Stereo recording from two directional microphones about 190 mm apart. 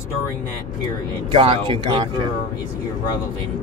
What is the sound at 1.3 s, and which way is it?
Speech, 30° right (ahead or behind).